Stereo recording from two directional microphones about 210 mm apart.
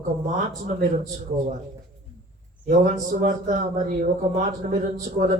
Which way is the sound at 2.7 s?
40° right (ahead or behind).